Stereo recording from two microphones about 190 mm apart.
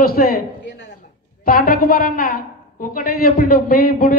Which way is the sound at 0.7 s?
70° left (ahead or behind).